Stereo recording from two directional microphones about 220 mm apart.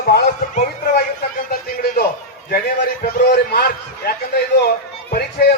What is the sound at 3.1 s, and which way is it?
A man's voice, 45° left (ahead or behind).